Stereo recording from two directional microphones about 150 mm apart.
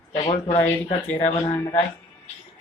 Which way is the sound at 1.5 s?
20° left (ahead or behind).